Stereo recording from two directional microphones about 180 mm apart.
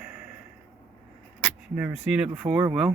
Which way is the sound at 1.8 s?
5° right (ahead or behind).